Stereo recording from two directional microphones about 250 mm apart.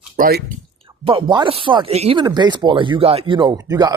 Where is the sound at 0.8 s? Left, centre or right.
Right.